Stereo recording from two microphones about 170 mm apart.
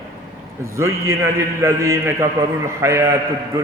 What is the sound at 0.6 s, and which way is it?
A man's voice, 15° right (ahead or behind).